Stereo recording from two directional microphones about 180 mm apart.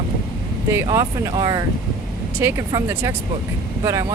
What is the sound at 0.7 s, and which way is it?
Speech, 15° right (ahead or behind).